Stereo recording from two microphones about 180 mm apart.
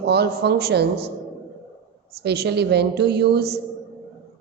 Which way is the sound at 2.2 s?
65° right (ahead or behind).